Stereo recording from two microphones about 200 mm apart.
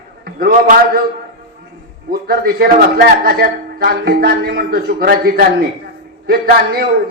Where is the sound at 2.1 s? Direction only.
50° right (ahead or behind).